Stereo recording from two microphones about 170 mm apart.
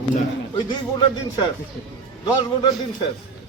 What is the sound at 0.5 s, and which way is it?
Speech, 25° left (ahead or behind).